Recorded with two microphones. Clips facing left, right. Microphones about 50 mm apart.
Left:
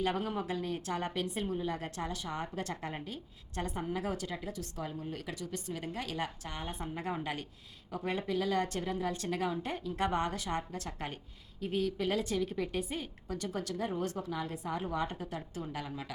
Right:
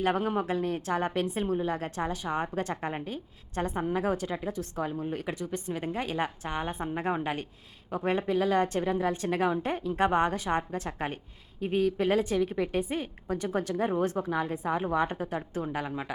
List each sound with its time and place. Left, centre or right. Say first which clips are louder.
0.0 s a woman's voice: right 6 dB; right